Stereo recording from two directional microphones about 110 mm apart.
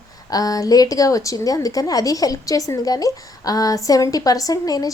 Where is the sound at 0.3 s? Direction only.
35° left (ahead or behind).